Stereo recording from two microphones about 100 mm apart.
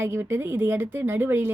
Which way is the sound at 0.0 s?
25° right (ahead or behind).